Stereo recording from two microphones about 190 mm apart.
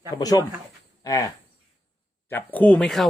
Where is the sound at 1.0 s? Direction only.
20° left (ahead or behind).